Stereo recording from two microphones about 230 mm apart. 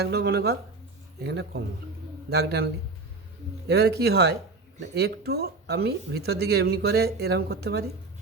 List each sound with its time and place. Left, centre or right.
0.0 s speech: right
3.7 s speech: right